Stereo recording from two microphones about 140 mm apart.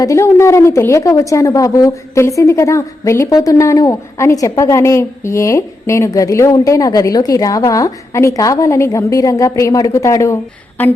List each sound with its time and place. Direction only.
0.0 s a woman's voice: 20° left (ahead or behind)